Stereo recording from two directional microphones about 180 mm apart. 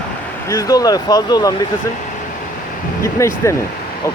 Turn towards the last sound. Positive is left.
turn(degrees=15)  # may be behind; listen again after turning